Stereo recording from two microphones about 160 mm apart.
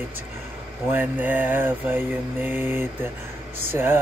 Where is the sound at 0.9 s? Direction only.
10° right (ahead or behind).